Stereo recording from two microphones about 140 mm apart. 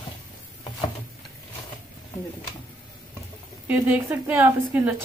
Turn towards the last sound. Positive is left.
turn(degrees=-15)  # may be behind; listen again after turning